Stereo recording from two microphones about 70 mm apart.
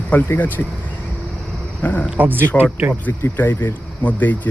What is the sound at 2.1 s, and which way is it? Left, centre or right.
Speech, right.